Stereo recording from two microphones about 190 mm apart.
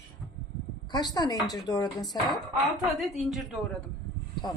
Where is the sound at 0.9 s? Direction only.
20° left (ahead or behind).